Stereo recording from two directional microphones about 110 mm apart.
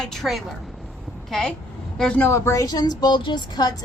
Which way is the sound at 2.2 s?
25° left (ahead or behind).